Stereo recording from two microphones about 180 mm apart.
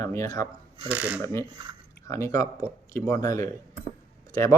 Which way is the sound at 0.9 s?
10° right (ahead or behind).